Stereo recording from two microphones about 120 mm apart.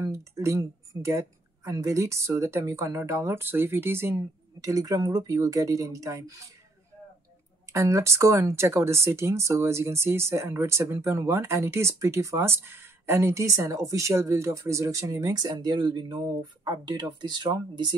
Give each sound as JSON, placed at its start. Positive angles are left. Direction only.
{"t": 0.0, "sound": "speech", "side_deg": -25}
{"t": 7.7, "sound": "speech", "side_deg": -25}